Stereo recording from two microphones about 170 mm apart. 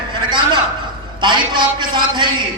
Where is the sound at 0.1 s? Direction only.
25° right (ahead or behind).